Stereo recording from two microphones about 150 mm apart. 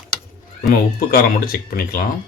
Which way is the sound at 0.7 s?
85° left.